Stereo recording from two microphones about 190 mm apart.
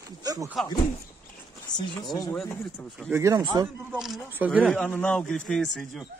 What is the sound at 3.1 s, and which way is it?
Speech, 15° right (ahead or behind).